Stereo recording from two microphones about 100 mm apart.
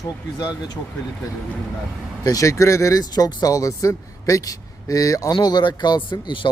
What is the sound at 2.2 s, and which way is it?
Speech, 35° left (ahead or behind).